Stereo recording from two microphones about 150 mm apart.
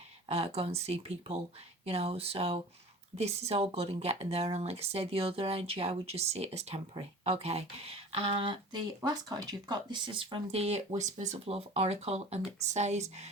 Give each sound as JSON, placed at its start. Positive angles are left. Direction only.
{"t": 0.3, "sound": "speech", "side_deg": -40}
{"t": 11.3, "sound": "speech", "side_deg": -40}